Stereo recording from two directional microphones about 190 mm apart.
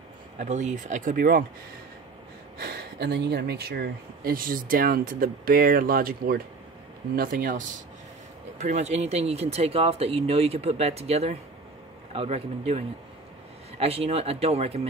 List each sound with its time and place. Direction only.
0.4 s speech: 40° right (ahead or behind)
2.6 s speech: 55° right (ahead or behind); by 14.9 s 35° right (ahead or behind)